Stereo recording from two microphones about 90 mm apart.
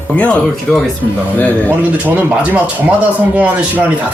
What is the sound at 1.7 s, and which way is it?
Speech, 20° right (ahead or behind).